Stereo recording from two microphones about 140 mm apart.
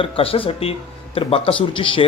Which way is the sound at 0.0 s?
40° left (ahead or behind).